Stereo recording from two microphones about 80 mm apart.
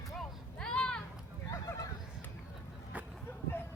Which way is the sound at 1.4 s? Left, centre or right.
Left.